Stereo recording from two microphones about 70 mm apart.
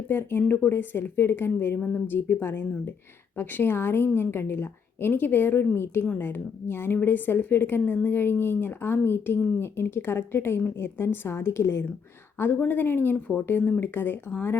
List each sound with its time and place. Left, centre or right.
0.1 s speech: left